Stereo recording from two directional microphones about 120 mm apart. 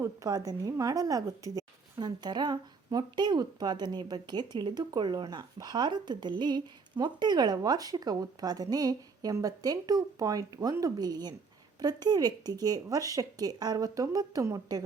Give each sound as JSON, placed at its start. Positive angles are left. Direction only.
{"t": 0.0, "sound": "a woman's voice", "side_deg": -30}